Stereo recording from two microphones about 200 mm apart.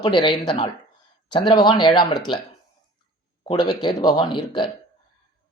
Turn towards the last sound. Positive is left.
turn(degrees=25)  # may be behind; listen again after turning